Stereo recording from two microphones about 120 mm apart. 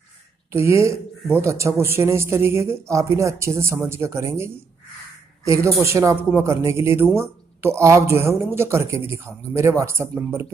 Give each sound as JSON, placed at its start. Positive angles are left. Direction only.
{"t": 0.5, "sound": "speech", "side_deg": -20}